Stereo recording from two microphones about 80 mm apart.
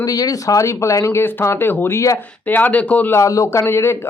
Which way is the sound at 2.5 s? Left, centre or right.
Left.